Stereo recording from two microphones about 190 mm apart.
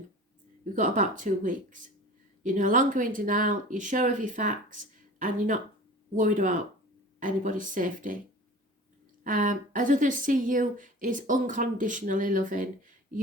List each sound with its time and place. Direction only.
0.6 s speech: 40° right (ahead or behind)
6.1 s speech: 45° right (ahead or behind)
9.2 s speech: 45° right (ahead or behind)